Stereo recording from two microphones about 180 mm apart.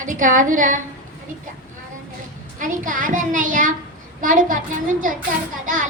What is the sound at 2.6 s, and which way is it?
A child's voice, 45° right (ahead or behind).